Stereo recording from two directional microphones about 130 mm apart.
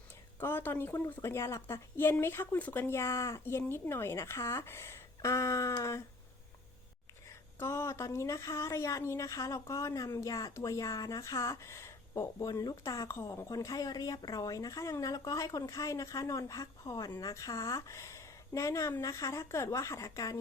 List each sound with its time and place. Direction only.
0.3 s speech: 15° left (ahead or behind)
7.6 s speech: 20° left (ahead or behind)